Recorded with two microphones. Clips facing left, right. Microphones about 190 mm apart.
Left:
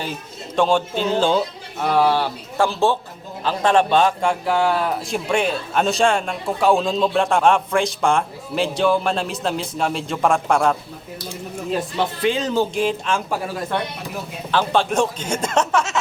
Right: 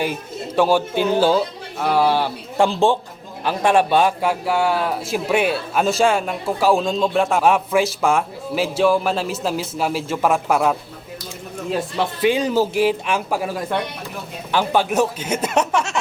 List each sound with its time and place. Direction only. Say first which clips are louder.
0.0 s a man's voice: right 6 dB; 10° right (ahead or behind)
12.2 s speech: right 3 dB; 10° right (ahead or behind)